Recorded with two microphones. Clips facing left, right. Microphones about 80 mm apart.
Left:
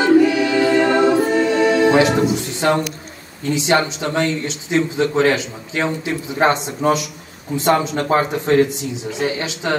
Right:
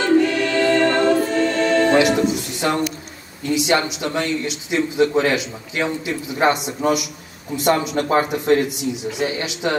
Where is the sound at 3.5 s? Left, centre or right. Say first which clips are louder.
Left 1 dB; left.